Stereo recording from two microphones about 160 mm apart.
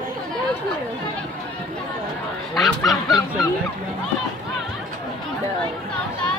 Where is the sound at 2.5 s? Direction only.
Centre (ahead or behind).